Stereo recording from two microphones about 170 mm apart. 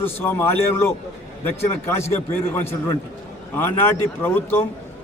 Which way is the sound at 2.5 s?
15° left (ahead or behind).